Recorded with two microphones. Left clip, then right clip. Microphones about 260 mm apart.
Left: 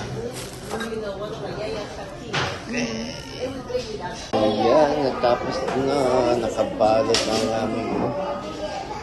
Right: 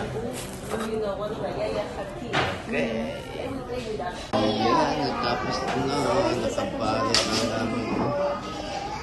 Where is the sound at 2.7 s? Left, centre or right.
Centre.